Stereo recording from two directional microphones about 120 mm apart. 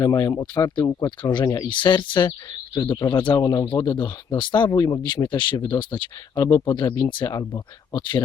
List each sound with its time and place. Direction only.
0.0 s speech: 30° left (ahead or behind)